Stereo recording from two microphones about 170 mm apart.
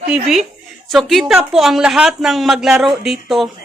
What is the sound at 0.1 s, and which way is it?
Speech, centre (ahead or behind).